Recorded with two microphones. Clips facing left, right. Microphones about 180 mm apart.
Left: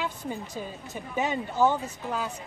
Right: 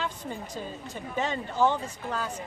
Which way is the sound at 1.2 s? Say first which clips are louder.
Left 1 dB; 10° left (ahead or behind).